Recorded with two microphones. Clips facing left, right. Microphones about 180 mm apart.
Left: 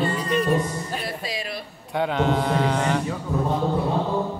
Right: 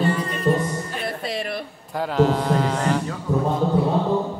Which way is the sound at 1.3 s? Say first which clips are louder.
Right 4 dB; 60° right (ahead or behind).